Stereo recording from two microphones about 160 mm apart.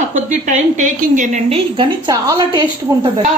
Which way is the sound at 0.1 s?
50° right (ahead or behind).